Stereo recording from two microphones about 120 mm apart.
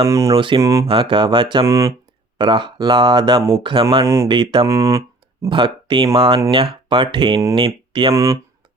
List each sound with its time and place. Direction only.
0.1 s speech: 25° right (ahead or behind)
0.3 s speech: 45° right (ahead or behind)
0.6 s speech: 25° right (ahead or behind)
0.9 s speech: 45° right (ahead or behind)
1.6 s speech: 25° right (ahead or behind)
2.4 s speech: 40° right (ahead or behind)
4.0 s speech: 25° right (ahead or behind)
4.3 s speech: 40° right (ahead or behind)
4.6 s a sound: 25° right (ahead or behind)
5.5 s speech: 45° right (ahead or behind)
8.1 s speech: 25° right (ahead or behind)